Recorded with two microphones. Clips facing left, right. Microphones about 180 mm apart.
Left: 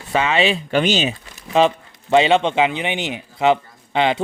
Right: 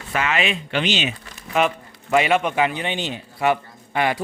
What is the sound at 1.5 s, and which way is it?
Speech, 30° left (ahead or behind).